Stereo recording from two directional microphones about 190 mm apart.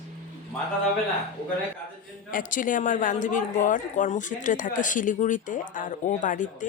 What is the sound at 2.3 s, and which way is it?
A woman's voice, 45° left (ahead or behind).